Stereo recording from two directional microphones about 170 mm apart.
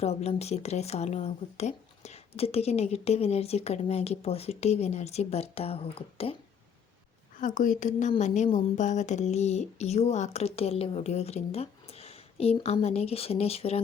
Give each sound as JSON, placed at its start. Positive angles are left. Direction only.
{"t": 0.0, "sound": "speech", "side_deg": 40}
{"t": 7.3, "sound": "a woman's voice", "side_deg": 50}